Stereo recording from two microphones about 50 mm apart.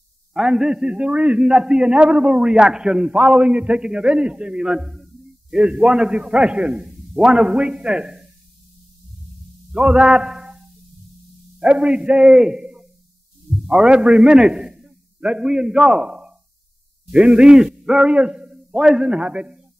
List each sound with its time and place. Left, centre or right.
0.3 s a man's voice: centre
3.2 s a man's voice: right
6.7 s a sound: centre
7.2 s a man's voice: centre
9.8 s a man's voice: centre
11.6 s a man's voice: right